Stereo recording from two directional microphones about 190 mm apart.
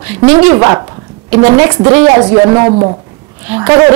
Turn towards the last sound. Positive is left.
turn(degrees=-10)  # may be behind; listen again after turning